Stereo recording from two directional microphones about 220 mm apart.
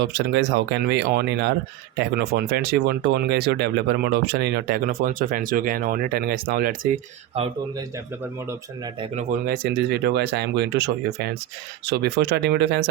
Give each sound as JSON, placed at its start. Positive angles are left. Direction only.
{"t": 0.0, "sound": "speech", "side_deg": -50}
{"t": 7.3, "sound": "speech", "side_deg": -25}
{"t": 9.5, "sound": "speech", "side_deg": -50}